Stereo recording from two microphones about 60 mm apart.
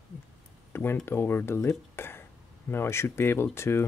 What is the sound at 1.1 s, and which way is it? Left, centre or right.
Speech, left.